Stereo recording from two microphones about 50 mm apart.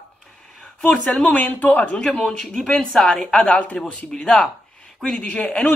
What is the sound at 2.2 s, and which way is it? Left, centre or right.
Speech, centre.